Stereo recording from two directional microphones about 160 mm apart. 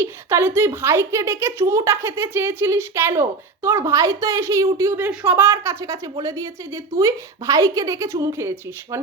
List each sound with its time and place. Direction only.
0.0 s speech: 15° right (ahead or behind)